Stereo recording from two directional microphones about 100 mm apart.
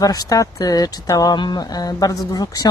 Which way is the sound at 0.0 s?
35° left (ahead or behind).